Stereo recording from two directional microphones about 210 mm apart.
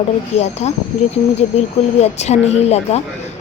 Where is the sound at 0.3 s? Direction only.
30° left (ahead or behind).